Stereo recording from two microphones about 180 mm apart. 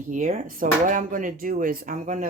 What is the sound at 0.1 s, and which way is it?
Speech, 45° right (ahead or behind).